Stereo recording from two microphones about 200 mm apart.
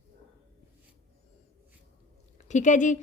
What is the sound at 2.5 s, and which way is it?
Speech, 35° left (ahead or behind).